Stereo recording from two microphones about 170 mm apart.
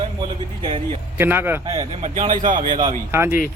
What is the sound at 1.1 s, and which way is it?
Speech, 10° right (ahead or behind).